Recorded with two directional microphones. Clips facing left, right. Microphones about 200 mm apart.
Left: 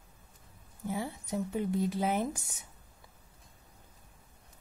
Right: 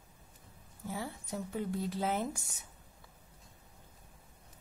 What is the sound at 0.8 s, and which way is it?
Speech, 20° left (ahead or behind).